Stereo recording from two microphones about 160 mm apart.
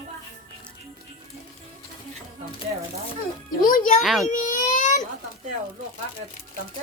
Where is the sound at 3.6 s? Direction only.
60° left (ahead or behind).